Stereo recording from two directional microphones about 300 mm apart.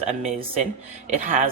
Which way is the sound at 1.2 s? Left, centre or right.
Right.